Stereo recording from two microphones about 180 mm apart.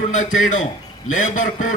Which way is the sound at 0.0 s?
45° left (ahead or behind).